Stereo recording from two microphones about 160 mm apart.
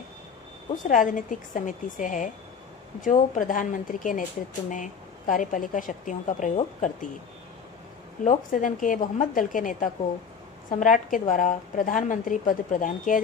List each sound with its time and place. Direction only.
0.8 s a woman's voice: 55° left (ahead or behind)
8.2 s a woman's voice: 55° left (ahead or behind)